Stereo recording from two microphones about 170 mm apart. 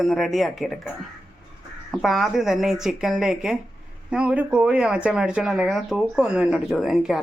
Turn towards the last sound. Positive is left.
turn(degrees=0)  # may be behind; listen again after turning